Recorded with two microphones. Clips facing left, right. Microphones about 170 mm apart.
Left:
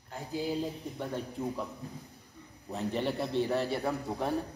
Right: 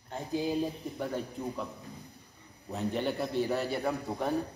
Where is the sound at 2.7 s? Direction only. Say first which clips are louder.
Even; centre (ahead or behind).